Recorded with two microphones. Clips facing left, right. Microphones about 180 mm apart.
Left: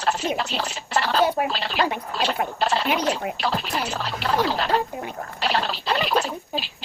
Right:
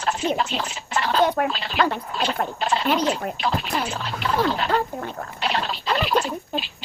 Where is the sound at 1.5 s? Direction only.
35° left (ahead or behind).